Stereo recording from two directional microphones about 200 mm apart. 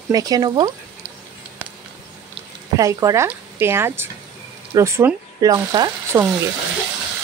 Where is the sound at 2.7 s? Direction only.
15° right (ahead or behind).